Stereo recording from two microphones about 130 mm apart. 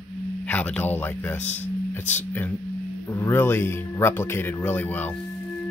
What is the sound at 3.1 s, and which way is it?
Speech, 15° left (ahead or behind).